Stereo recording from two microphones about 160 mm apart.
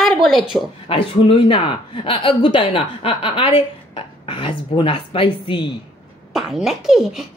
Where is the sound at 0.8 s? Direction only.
35° left (ahead or behind).